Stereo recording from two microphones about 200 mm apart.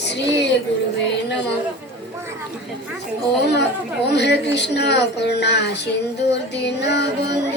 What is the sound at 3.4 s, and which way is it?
Speech, 55° left (ahead or behind).